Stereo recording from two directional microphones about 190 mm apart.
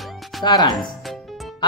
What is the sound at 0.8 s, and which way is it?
Music, centre (ahead or behind).